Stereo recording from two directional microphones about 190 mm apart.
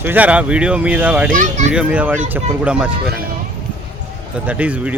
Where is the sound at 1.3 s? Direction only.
40° right (ahead or behind).